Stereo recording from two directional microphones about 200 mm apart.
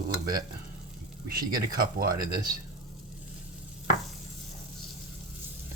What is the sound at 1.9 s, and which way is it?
Speech, 45° right (ahead or behind).